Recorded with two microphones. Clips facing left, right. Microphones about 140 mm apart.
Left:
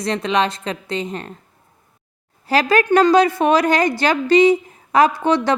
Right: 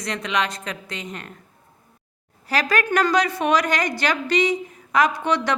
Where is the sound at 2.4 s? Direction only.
30° left (ahead or behind).